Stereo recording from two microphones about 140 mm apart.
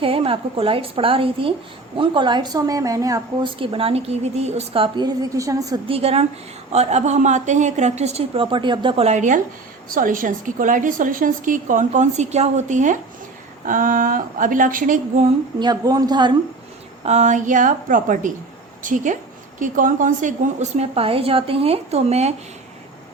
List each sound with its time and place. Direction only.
0.0 s a woman's voice: 40° right (ahead or behind); by 3.2 s 25° right (ahead or behind)
3.4 s a woman's voice: 40° right (ahead or behind)
5.9 s a woman's voice: 45° right (ahead or behind)
9.0 s a woman's voice: 60° right (ahead or behind)
9.9 s a woman's voice: 75° right (ahead or behind)
15.5 s a woman's voice: 30° right (ahead or behind)
17.1 s a woman's voice: 55° right (ahead or behind)